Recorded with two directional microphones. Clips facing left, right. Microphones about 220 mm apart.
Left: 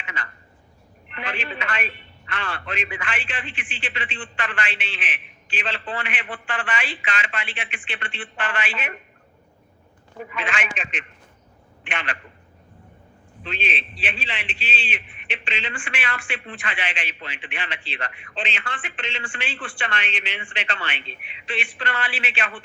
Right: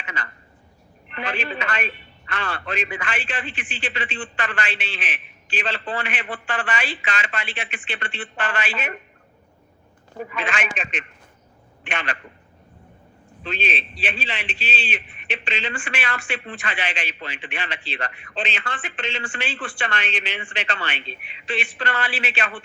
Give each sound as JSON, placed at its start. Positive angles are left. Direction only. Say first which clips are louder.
{"t": 0.0, "sound": "a sound", "louder": "right 2 dB", "side_deg": -40}
{"t": 1.1, "sound": "a man's voice", "louder": "right 3 dB", "side_deg": -40}
{"t": 10.2, "sound": "a man's voice", "louder": "right 2 dB", "side_deg": -40}
{"t": 13.4, "sound": "a man's voice", "louder": "right 3 dB", "side_deg": -40}